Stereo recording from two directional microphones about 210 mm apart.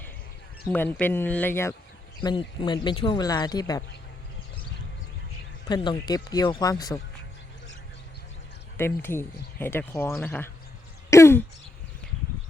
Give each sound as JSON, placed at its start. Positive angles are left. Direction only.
{"t": 0.6, "sound": "speech", "side_deg": 5}
{"t": 2.2, "sound": "speech", "side_deg": 25}
{"t": 5.6, "sound": "speech", "side_deg": 20}
{"t": 8.8, "sound": "speech", "side_deg": 10}
{"t": 11.1, "sound": "a sound", "side_deg": 10}